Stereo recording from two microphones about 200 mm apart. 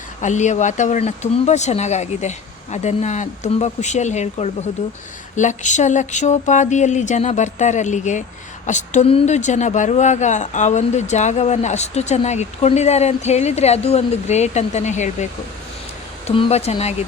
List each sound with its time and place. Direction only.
0.2 s a woman's voice: 35° left (ahead or behind)